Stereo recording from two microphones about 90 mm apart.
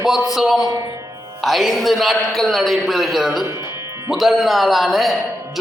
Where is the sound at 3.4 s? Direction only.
35° right (ahead or behind).